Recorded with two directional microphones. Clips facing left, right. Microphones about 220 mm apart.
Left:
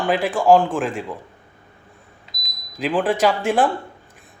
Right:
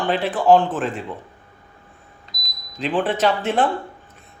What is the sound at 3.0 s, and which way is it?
Speech, 10° left (ahead or behind).